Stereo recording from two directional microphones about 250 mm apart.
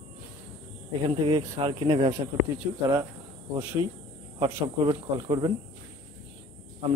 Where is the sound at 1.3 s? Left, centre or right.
Centre.